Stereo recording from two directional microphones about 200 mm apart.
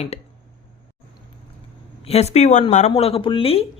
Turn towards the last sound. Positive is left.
turn(degrees=30)  # may be behind; listen again after turning